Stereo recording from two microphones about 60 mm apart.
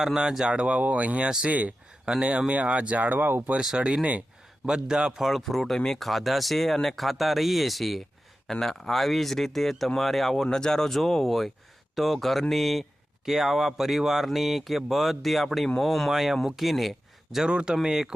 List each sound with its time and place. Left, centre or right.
0.0 s speech: centre; by 3.5 s right
3.6 s speech: centre
5.2 s speech: centre
17.3 s speech: centre